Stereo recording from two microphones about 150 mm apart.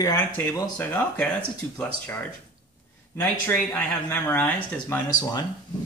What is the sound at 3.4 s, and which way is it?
Speech, 10° left (ahead or behind).